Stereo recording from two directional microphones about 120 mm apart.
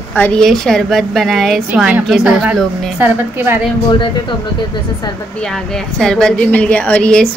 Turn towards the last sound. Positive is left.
turn(degrees=10)  # may be behind; listen again after turning